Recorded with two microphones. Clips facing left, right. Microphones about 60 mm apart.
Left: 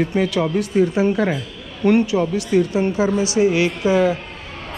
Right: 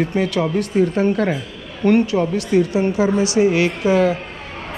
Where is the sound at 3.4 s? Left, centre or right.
Right.